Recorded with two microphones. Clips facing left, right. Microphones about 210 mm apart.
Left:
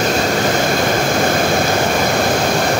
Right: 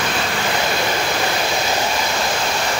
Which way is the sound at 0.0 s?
40° left (ahead or behind).